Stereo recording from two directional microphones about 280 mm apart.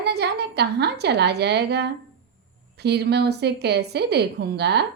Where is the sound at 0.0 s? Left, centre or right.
Right.